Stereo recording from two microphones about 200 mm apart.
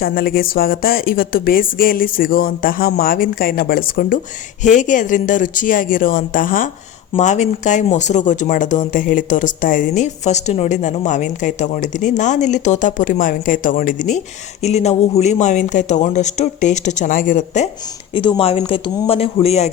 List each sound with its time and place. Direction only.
0.0 s speech: 50° left (ahead or behind)
18.1 s speech: 25° left (ahead or behind)